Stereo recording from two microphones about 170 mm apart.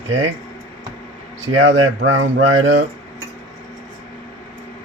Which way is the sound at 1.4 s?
90° right.